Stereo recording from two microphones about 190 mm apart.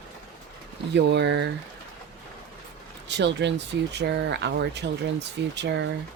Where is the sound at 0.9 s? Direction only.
65° right (ahead or behind).